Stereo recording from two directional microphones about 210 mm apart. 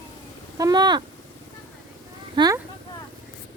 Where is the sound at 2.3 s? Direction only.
20° right (ahead or behind).